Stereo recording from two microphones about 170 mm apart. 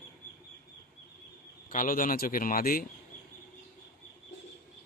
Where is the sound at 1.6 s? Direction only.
55° left (ahead or behind).